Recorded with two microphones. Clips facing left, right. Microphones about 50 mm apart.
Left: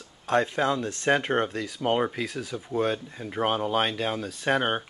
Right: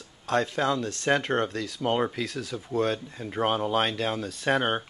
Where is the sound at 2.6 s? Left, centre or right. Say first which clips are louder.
Even; centre.